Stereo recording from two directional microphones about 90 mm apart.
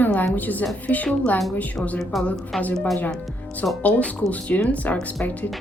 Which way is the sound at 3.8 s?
15° left (ahead or behind).